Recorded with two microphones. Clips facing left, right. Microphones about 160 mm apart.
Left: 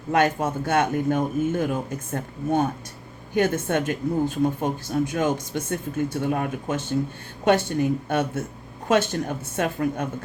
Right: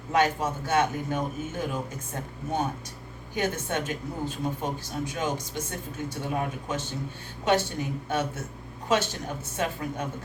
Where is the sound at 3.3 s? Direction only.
55° left (ahead or behind).